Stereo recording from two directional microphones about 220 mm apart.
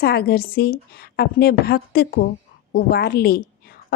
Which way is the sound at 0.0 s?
45° left (ahead or behind).